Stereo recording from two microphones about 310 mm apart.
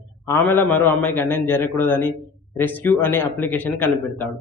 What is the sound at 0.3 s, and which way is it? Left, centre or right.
A man's voice, centre.